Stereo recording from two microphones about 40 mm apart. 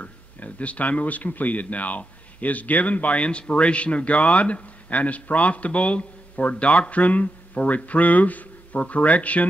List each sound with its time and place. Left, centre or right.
0.0 s speech: left